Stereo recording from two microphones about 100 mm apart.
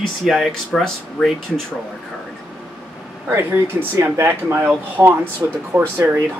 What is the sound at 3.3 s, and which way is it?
Speech, 25° right (ahead or behind).